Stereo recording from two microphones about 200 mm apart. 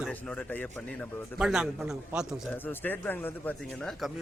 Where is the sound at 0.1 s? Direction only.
10° left (ahead or behind).